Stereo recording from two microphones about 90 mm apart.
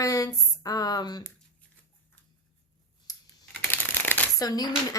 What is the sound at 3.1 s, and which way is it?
Computer keyboard, 45° left (ahead or behind).